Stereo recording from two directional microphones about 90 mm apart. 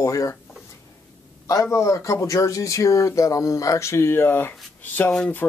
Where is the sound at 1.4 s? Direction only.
35° left (ahead or behind).